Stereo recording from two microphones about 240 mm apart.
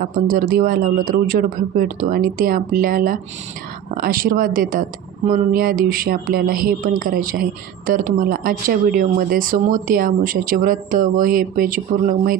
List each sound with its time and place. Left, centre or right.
0.1 s speech: right